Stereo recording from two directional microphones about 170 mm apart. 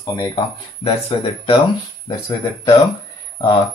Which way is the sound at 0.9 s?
35° left (ahead or behind).